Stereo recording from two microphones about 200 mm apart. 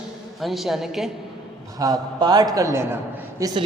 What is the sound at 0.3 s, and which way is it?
Speech, centre (ahead or behind).